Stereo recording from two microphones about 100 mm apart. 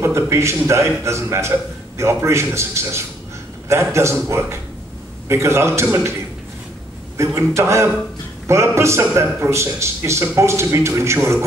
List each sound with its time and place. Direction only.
0.0 s a man's voice: 25° right (ahead or behind)
7.2 s a man's voice: 30° right (ahead or behind)